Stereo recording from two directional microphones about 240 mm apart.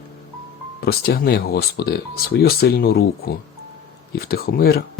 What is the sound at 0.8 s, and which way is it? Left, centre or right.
Speech, left.